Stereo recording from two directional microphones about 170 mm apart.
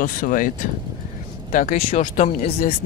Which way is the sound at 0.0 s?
55° left (ahead or behind).